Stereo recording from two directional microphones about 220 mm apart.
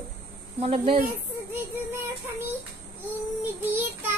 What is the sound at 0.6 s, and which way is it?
Speech, 25° right (ahead or behind).